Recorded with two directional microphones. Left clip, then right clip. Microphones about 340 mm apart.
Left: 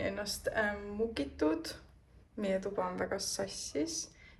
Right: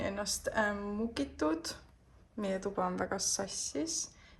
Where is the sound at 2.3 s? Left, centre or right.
Centre.